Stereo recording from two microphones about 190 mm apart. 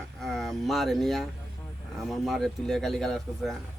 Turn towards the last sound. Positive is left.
turn(degrees=0)  # may be behind; listen again after turning